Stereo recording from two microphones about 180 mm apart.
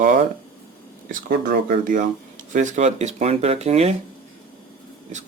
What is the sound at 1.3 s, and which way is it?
Speech, 50° right (ahead or behind).